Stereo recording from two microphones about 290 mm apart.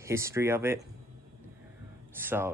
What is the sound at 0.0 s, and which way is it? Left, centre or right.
Speech, centre.